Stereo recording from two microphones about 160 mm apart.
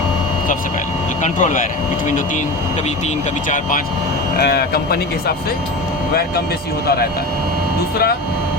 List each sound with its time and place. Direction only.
1.2 s speech: 50° left (ahead or behind)
4.4 s speech: 85° left